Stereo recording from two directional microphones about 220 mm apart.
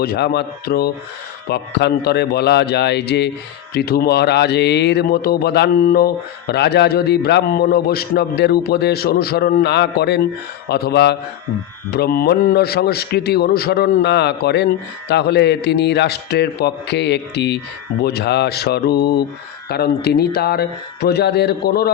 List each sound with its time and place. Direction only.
0.0 s a man's voice: 45° left (ahead or behind)